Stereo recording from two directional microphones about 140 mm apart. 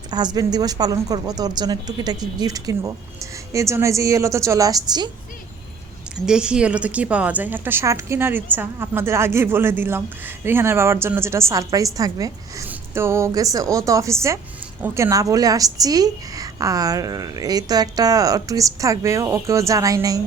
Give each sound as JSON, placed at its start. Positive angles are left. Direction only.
{"t": 0.1, "sound": "a woman's voice", "side_deg": -30}
{"t": 6.1, "sound": "a woman's voice", "side_deg": -5}